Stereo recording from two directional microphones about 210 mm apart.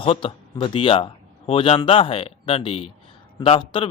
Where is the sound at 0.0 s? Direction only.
25° left (ahead or behind).